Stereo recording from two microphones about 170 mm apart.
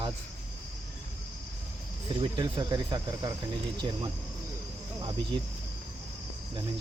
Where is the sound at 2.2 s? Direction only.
30° right (ahead or behind).